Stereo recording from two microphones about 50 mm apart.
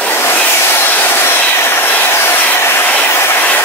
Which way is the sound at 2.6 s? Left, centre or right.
Left.